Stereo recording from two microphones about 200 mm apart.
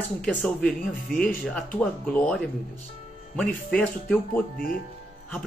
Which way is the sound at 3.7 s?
5° left (ahead or behind).